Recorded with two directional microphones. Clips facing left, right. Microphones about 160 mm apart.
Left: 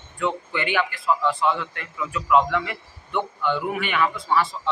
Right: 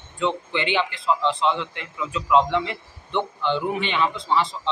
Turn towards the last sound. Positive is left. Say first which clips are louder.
# even
turn(degrees=-20)  # may be behind; listen again after turning